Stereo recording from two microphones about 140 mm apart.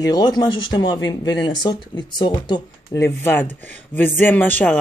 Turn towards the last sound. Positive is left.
turn(degrees=10)  # may be behind; listen again after turning